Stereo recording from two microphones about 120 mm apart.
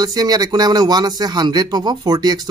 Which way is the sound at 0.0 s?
30° right (ahead or behind).